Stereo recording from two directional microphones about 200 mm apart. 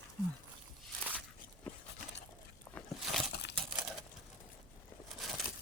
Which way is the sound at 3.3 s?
60° left (ahead or behind).